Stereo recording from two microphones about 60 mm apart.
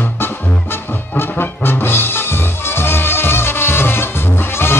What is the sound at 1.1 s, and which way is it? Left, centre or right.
Music, left.